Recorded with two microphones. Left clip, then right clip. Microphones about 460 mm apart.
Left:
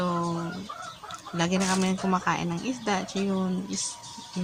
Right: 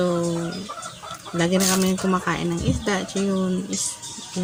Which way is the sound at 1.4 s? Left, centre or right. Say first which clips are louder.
Right 5 dB; left.